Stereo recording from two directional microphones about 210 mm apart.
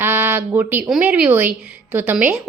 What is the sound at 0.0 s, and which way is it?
A woman's voice, 10° right (ahead or behind).